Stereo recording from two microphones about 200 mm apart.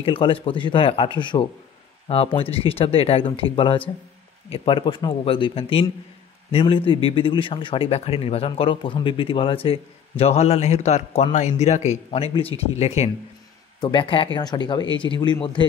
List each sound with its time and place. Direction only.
0.0 s speech: 25° left (ahead or behind)
13.7 s speech: 20° left (ahead or behind)